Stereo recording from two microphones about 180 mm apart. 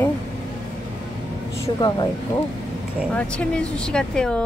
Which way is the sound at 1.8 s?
20° left (ahead or behind).